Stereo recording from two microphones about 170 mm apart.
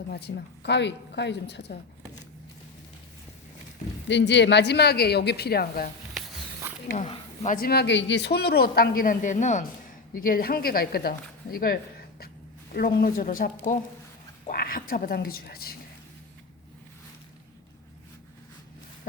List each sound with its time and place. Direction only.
0.1 s a woman's voice: 75° left (ahead or behind); by 1.7 s 90° left
4.1 s a woman's voice: 90° left; by 5.9 s 65° left (ahead or behind)
6.9 s a sound: 40° left (ahead or behind)
7.5 s a man's voice: 65° left (ahead or behind); by 9.6 s 45° left (ahead or behind)
10.2 s a man's voice: 60° left (ahead or behind)